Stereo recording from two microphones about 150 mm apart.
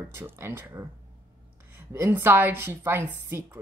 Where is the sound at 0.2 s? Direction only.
15° right (ahead or behind).